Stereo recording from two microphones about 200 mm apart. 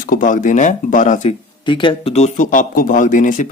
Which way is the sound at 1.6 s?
25° left (ahead or behind).